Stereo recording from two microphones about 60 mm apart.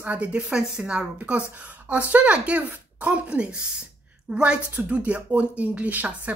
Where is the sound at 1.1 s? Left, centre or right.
Right.